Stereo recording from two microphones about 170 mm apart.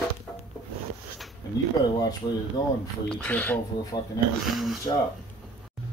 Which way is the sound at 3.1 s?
5° left (ahead or behind).